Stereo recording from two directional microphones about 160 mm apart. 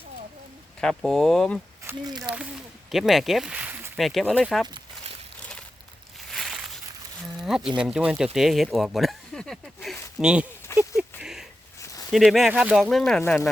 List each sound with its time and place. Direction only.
0.8 s speech: 5° left (ahead or behind)
1.8 s speech: 20° right (ahead or behind)
2.9 s speech: centre (ahead or behind)
6.3 s a sound: centre (ahead or behind)
7.3 s speech: centre (ahead or behind)
10.9 s a sound: 5° right (ahead or behind)
12.1 s speech: centre (ahead or behind)